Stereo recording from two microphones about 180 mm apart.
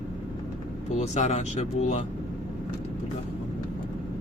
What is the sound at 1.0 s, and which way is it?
Speech, 40° left (ahead or behind).